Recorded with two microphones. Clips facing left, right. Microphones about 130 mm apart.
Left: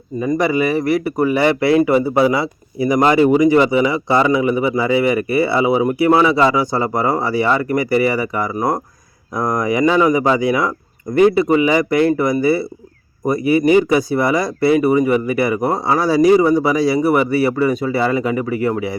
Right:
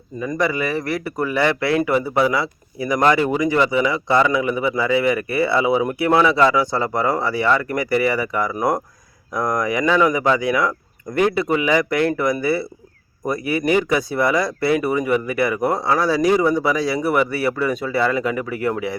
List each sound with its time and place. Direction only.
0.2 s speech: 15° left (ahead or behind)
3.0 s speech: 30° left (ahead or behind)
3.3 s speech: 15° left (ahead or behind)